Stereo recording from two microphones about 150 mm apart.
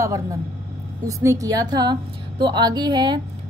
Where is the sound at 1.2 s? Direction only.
20° right (ahead or behind).